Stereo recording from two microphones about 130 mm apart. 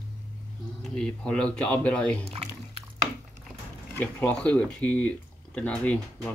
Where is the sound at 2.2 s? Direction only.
55° right (ahead or behind).